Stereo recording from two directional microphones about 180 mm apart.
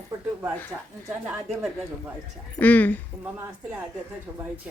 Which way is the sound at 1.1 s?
5° right (ahead or behind).